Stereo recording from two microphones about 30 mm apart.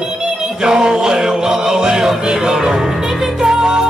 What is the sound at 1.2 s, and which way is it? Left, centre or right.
Music, centre.